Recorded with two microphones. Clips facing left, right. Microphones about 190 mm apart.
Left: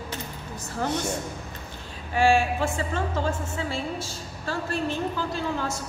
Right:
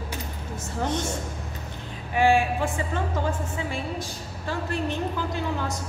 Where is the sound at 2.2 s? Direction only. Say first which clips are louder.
Even; 15° right (ahead or behind).